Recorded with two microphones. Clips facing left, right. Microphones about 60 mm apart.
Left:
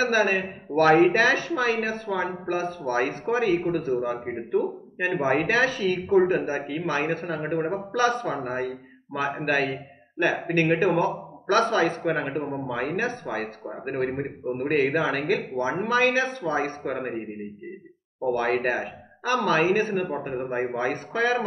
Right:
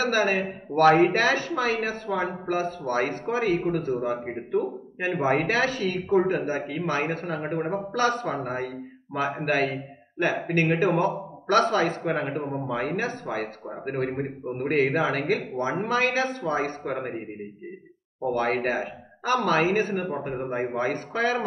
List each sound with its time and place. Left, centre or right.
0.0 s a man's voice: centre
10.7 s a man's voice: centre
18.2 s a man's voice: centre